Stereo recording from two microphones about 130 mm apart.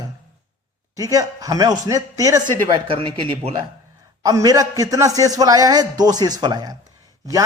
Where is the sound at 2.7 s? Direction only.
40° right (ahead or behind).